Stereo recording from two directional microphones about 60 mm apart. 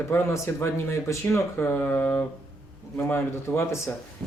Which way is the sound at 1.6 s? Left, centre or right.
Left.